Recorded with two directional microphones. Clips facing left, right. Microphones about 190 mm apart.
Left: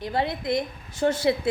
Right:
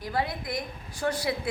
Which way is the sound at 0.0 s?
25° left (ahead or behind).